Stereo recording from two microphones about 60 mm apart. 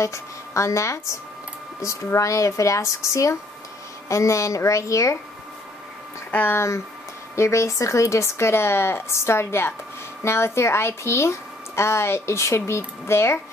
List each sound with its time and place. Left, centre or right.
0.0 s a woman's voice: left
6.3 s speech: left
7.3 s a woman's voice: left